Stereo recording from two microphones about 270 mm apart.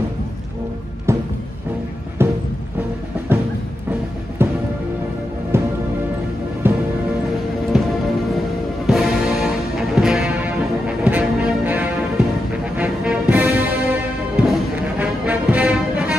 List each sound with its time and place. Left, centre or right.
1.1 s music: centre
4.4 s music: centre